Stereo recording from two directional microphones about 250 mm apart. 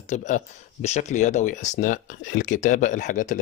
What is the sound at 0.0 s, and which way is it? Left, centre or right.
Speech, left.